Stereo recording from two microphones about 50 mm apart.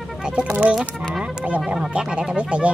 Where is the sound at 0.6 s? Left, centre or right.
Right.